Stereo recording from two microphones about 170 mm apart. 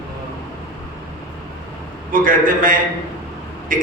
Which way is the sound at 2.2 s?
55° right (ahead or behind).